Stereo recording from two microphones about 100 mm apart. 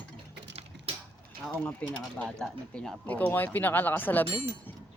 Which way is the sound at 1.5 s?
15° left (ahead or behind).